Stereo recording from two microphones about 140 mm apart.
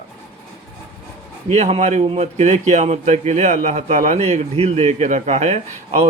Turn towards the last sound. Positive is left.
turn(degrees=-50)  # may be behind; listen again after turning